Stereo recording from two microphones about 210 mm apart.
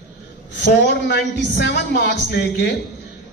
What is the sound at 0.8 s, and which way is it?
A man's voice, 50° left (ahead or behind).